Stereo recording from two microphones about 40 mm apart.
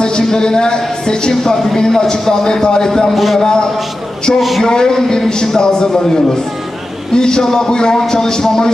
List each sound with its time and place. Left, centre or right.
0.0 s a woman's voice: centre
3.3 s a woman's voice: centre
4.4 s a man's voice: centre
4.6 s a man's voice: centre